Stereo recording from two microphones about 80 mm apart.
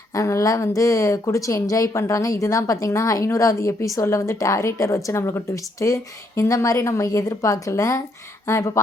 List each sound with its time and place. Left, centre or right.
0.1 s a woman's voice: left